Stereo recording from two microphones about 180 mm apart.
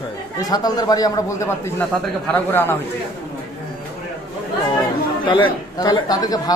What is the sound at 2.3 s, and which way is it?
Speech, 10° left (ahead or behind).